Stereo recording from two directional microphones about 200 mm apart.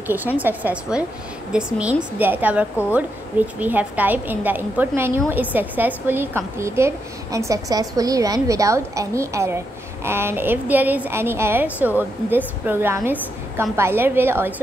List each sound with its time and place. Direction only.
0.1 s a woman's voice: 10° right (ahead or behind)